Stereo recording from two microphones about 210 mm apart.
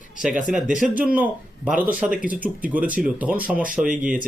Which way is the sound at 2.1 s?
40° right (ahead or behind).